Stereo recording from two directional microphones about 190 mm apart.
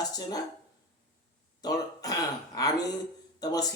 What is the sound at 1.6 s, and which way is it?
A man's voice, 20° left (ahead or behind).